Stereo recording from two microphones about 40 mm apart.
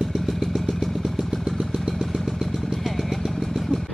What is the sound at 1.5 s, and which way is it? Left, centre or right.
Vehicle, centre.